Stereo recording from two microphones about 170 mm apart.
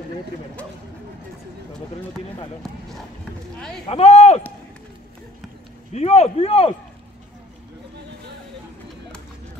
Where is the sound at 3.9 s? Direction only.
35° left (ahead or behind).